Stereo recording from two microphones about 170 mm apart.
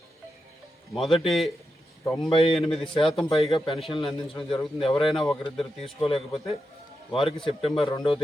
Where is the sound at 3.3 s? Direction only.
30° left (ahead or behind).